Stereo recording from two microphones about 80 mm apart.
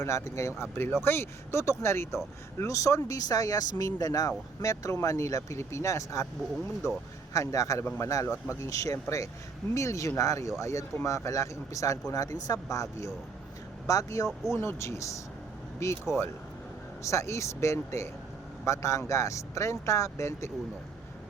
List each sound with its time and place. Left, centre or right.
0.0 s speech: left
7.9 s speech: left